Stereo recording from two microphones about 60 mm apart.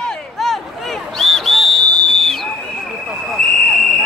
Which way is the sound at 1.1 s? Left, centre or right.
Centre.